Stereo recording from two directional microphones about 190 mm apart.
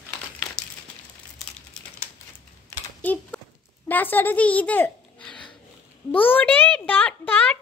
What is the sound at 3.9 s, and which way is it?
A child's voice, 10° left (ahead or behind).